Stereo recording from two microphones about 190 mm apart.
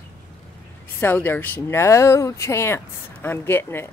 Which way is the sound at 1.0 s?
10° left (ahead or behind).